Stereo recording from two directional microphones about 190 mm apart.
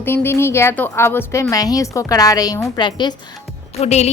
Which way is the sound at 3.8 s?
35° left (ahead or behind).